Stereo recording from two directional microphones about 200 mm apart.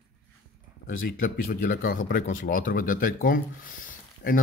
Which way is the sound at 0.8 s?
45° left (ahead or behind).